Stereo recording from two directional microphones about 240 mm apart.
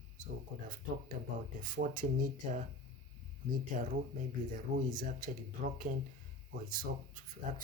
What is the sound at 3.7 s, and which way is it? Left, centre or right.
Speech, right.